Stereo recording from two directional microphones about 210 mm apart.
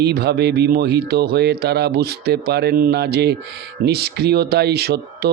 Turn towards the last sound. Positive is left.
turn(degrees=-50)  # may be behind; listen again after turning